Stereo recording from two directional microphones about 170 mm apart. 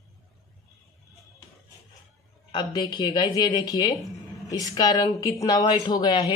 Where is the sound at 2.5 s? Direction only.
25° left (ahead or behind).